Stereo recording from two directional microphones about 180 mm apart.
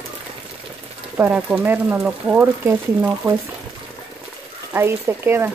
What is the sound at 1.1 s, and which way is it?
Speech, 10° right (ahead or behind).